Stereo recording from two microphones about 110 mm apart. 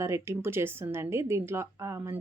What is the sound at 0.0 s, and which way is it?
Speech, 25° right (ahead or behind).